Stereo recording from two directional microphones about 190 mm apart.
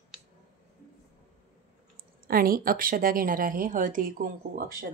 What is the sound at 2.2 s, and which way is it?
A woman's voice, 50° right (ahead or behind).